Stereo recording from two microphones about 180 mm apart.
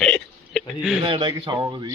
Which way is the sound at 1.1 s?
25° right (ahead or behind).